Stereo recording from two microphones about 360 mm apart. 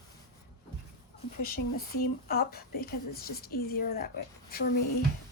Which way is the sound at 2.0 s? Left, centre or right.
Left.